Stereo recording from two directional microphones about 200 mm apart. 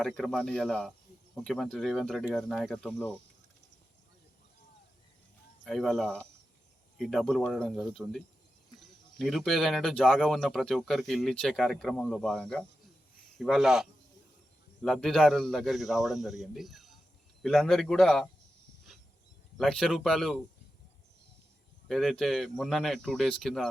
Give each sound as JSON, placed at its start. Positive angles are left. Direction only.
{"t": 0.0, "sound": "speech", "side_deg": 5}
{"t": 5.6, "sound": "speech", "side_deg": 0}
{"t": 19.5, "sound": "speech", "side_deg": 0}
{"t": 21.8, "sound": "speech", "side_deg": 0}